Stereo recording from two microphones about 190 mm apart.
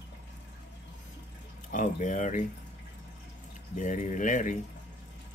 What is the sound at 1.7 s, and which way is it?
Speech, 40° left (ahead or behind).